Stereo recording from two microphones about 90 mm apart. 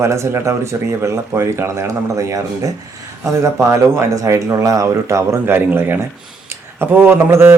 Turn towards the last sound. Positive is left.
turn(degrees=-25)  # may be behind; listen again after turning